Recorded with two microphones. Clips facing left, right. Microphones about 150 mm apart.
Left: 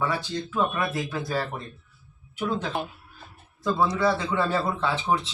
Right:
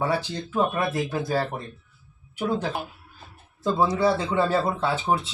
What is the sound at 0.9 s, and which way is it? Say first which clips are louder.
Speech: right 3 dB; 15° right (ahead or behind).